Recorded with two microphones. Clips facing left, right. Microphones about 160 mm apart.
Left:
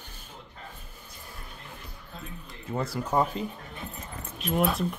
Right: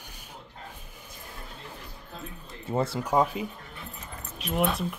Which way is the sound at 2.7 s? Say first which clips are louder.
Right 4 dB; 30° right (ahead or behind).